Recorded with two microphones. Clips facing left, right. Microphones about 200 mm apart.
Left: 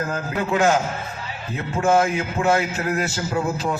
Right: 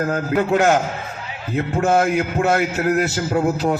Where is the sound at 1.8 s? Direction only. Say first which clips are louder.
Right 1 dB; 45° right (ahead or behind).